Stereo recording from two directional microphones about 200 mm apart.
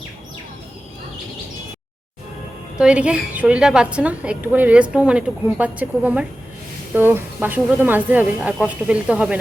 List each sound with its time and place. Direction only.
2.7 s a woman's voice: 5° right (ahead or behind)